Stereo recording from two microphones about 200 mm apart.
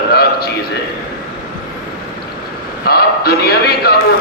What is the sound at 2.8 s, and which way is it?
A man's voice, 50° left (ahead or behind).